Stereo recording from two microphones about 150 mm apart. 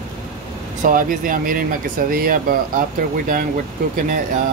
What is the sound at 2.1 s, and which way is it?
Speech, 80° right.